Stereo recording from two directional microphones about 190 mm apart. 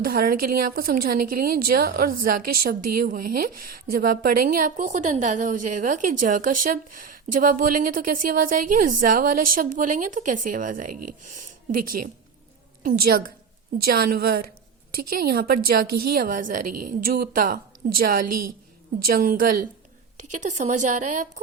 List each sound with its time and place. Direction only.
0.0 s a woman's voice: 50° right (ahead or behind)